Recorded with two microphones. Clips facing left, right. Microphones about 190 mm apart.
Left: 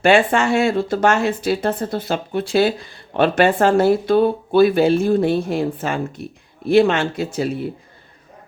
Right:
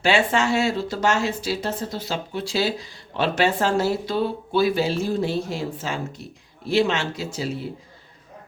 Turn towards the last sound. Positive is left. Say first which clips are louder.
# left 6 dB
turn(degrees=55)  # may be behind; listen again after turning